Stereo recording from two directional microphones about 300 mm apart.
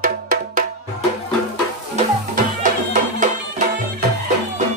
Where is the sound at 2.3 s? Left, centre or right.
Right.